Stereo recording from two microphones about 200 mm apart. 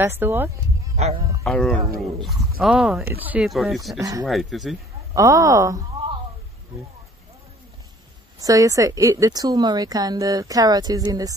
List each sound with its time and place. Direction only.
0.0 s a woman's voice: 10° right (ahead or behind)
0.9 s speech: 35° right (ahead or behind)
1.4 s speech: 5° left (ahead or behind)
4.0 s speech: 20° right (ahead or behind)
4.3 s speech: centre (ahead or behind)
5.1 s a woman's voice: 15° right (ahead or behind)
8.4 s a woman's voice: 15° right (ahead or behind)